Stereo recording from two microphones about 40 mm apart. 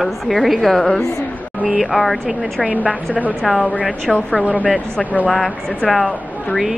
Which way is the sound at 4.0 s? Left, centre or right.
Left.